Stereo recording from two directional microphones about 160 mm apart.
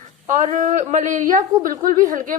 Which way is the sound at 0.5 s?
55° right (ahead or behind).